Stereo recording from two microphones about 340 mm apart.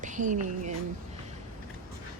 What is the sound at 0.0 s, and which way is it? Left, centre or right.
Speech, right.